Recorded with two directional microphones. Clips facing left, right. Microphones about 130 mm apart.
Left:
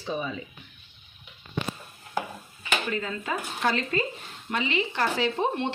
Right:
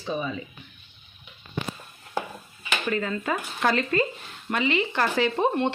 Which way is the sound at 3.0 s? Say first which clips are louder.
Right 3 dB; 55° right (ahead or behind).